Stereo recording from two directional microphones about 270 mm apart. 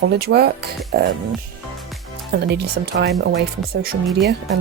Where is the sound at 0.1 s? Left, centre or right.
Right.